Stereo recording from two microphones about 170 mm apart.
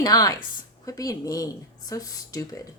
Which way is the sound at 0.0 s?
20° left (ahead or behind).